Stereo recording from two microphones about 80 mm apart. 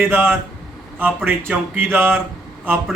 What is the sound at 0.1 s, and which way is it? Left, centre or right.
Speech, right.